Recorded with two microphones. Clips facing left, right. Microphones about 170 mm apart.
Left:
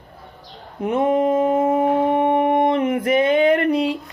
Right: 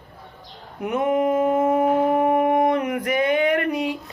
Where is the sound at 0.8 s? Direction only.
30° left (ahead or behind).